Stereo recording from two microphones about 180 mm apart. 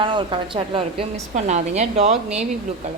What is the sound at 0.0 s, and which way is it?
A woman's voice, 25° right (ahead or behind).